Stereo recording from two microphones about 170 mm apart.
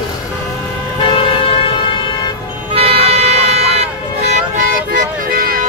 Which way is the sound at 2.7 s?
35° right (ahead or behind).